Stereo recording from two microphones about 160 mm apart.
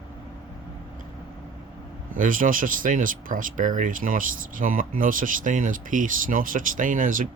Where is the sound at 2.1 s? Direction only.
60° right (ahead or behind).